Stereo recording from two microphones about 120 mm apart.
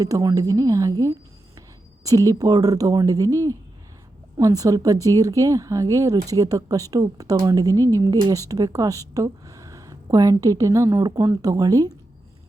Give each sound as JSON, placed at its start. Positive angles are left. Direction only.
{"t": 0.0, "sound": "speech", "side_deg": -30}